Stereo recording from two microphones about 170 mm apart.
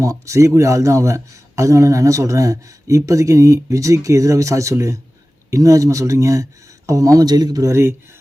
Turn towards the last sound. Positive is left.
turn(degrees=-20)  # may be behind; listen again after turning